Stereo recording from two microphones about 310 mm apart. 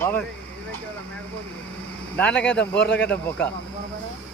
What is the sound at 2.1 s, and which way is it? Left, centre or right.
Speech, centre.